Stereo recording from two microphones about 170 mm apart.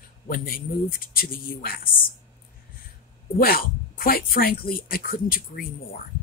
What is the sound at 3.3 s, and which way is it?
A woman's voice, 60° left (ahead or behind).